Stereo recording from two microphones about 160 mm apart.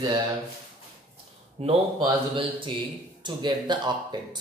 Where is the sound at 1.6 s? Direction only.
40° right (ahead or behind).